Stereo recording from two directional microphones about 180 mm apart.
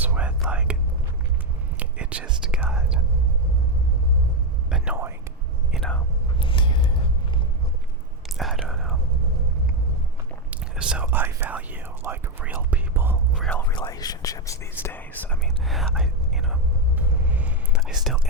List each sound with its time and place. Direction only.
0.0 s whispering: 10° right (ahead or behind)
1.8 s whispering: 5° right (ahead or behind)
4.7 s whispering: 10° right (ahead or behind)
5.7 s whispering: 5° left (ahead or behind)
6.4 s a sound: 25° left (ahead or behind)
8.4 s whispering: centre (ahead or behind)
10.5 s whispering: 5° right (ahead or behind)
13.4 s a sound: 10° left (ahead or behind)
13.7 s whispering: 20° left (ahead or behind); by 18.2 s centre (ahead or behind)